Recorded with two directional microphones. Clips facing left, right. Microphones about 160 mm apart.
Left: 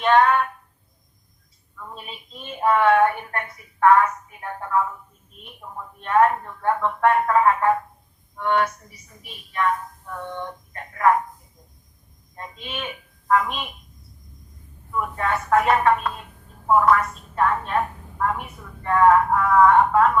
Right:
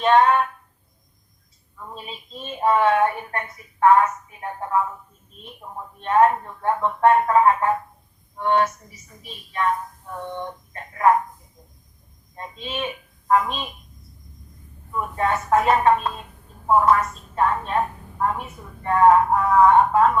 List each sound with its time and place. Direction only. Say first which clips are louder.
0.0 s a woman's voice: right 1 dB; 25° right (ahead or behind)
2.0 s a woman's voice: right 3 dB; 25° right (ahead or behind)
6.0 s a woman's voice: right 1 dB; 25° right (ahead or behind)
12.4 s a woman's voice: right 4 dB; 25° right (ahead or behind)
14.9 s a woman's voice: right 1 dB; 25° right (ahead or behind)
18.8 s a woman's voice: right 1 dB; 25° right (ahead or behind)